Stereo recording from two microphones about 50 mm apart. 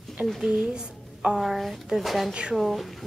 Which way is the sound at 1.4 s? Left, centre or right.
Centre.